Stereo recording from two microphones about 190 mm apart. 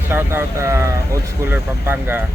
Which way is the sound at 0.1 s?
10° right (ahead or behind).